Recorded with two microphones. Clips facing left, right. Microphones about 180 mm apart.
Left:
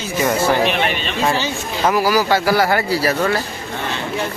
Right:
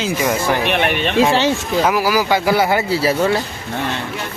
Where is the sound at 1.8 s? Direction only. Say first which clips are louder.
Left 2 dB; 10° right (ahead or behind); by 3.1 s 25° right (ahead or behind).